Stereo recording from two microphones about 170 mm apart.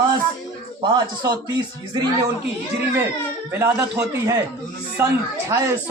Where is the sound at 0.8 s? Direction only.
25° right (ahead or behind).